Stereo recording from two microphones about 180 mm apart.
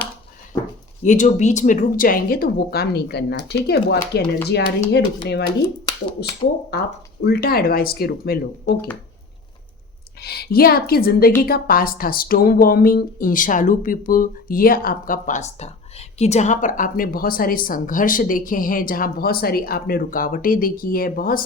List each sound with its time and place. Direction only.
1.0 s speech: 45° left (ahead or behind); by 8.7 s 60° left (ahead or behind)
10.2 s speech: 60° left (ahead or behind)